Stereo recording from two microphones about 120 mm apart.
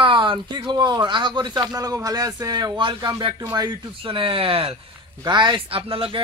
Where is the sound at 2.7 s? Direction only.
40° right (ahead or behind).